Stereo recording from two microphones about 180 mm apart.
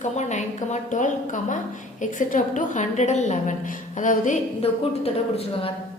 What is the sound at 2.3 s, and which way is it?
A woman's voice, 45° left (ahead or behind).